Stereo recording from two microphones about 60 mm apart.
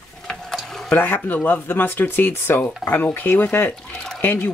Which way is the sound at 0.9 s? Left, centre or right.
Left.